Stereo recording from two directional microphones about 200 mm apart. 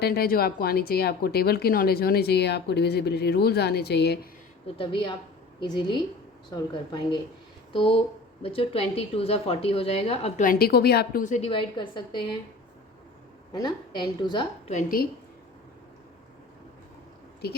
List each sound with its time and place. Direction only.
0.0 s a woman's voice: 50° left (ahead or behind)
4.6 s a woman's voice: 25° left (ahead or behind)
10.4 s a woman's voice: 45° left (ahead or behind); by 12.4 s 25° left (ahead or behind)
13.5 s a woman's voice: 20° left (ahead or behind)
14.7 s a woman's voice: 40° left (ahead or behind)